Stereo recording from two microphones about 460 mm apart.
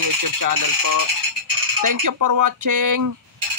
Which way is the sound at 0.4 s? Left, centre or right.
Right.